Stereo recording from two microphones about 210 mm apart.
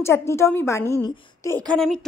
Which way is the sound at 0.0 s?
10° left (ahead or behind).